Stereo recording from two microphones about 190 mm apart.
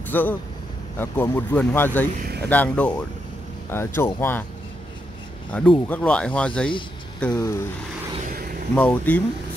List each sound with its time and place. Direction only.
0.1 s speech: 10° left (ahead or behind)
2.1 s speech: 55° right (ahead or behind)
2.5 s speech: 10° left (ahead or behind)
5.5 s speech: 5° left (ahead or behind)
8.7 s speech: 10° left (ahead or behind)